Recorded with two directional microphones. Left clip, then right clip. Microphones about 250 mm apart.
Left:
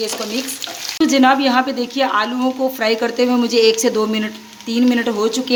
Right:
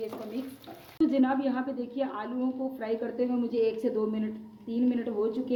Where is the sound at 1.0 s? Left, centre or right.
Left.